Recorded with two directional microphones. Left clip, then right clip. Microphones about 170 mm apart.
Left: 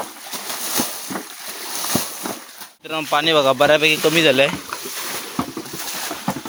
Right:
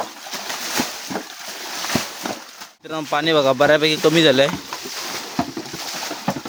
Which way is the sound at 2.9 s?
20° right (ahead or behind).